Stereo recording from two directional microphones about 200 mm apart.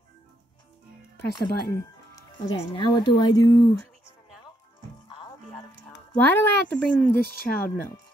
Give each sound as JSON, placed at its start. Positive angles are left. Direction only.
{"t": 1.3, "sound": "speech", "side_deg": 20}
{"t": 6.1, "sound": "a woman's voice", "side_deg": 10}
{"t": 7.1, "sound": "speech", "side_deg": 50}